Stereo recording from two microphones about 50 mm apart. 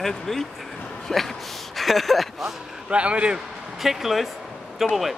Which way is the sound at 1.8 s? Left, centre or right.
Centre.